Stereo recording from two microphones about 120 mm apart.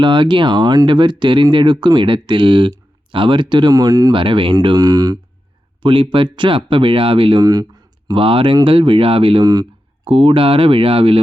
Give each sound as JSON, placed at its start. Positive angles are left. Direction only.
{"t": 0.0, "sound": "speech", "side_deg": -40}
{"t": 4.1, "sound": "speech", "side_deg": -45}
{"t": 4.6, "sound": "speech", "side_deg": -35}
{"t": 5.8, "sound": "speech", "side_deg": -45}
{"t": 7.4, "sound": "a sound", "side_deg": -30}
{"t": 8.1, "sound": "speech", "side_deg": -50}
{"t": 9.4, "sound": "speech", "side_deg": -35}
{"t": 10.0, "sound": "speech", "side_deg": -45}